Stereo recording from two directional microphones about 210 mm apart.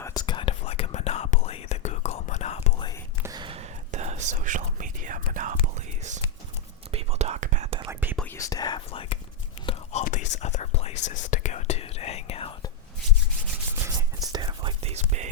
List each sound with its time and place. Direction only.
0.0 s whispering: 20° left (ahead or behind)
3.2 s whispering: 20° right (ahead or behind)
8.1 s whispering: 10° left (ahead or behind); by 12.7 s 25° left (ahead or behind)
13.8 s whispering: 20° right (ahead or behind)